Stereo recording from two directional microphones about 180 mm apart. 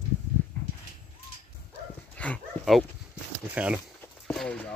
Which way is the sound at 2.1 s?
5° left (ahead or behind).